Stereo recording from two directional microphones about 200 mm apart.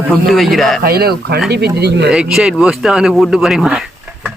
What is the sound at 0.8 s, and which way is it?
Speech, 50° right (ahead or behind).